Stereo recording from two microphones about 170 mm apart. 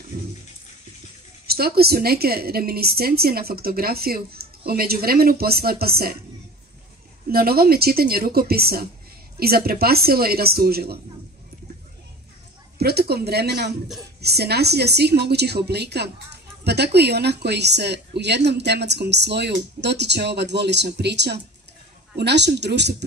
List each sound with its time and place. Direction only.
1.5 s a woman's voice: 65° right (ahead or behind)
7.2 s a woman's voice: 60° right (ahead or behind)
12.7 s a woman's voice: 70° right (ahead or behind); by 23.0 s 85° right